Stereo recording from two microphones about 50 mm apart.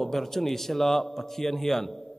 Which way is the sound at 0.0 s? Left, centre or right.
Centre.